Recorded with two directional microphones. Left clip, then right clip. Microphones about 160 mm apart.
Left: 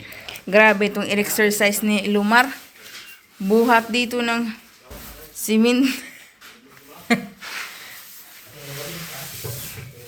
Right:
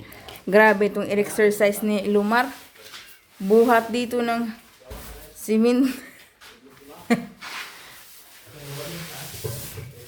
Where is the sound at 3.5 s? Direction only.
15° right (ahead or behind).